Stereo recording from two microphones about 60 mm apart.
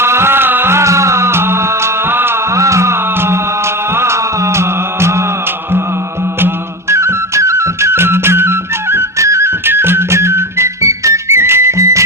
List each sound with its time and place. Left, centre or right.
0.0 s music: right
2.6 s music: right
6.9 s music: right
9.6 s music: right